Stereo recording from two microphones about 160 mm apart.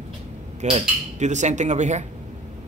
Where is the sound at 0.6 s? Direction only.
45° right (ahead or behind).